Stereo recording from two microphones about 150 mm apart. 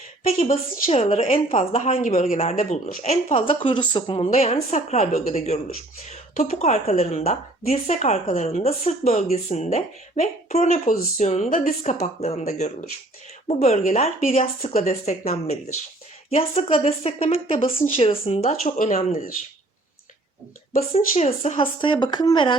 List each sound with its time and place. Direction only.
0.5 s a woman's voice: 40° left (ahead or behind)
2.0 s a woman's voice: 55° left (ahead or behind)
18.6 s speech: 65° left (ahead or behind)
21.2 s speech: 50° left (ahead or behind)
21.6 s a woman's voice: 35° left (ahead or behind)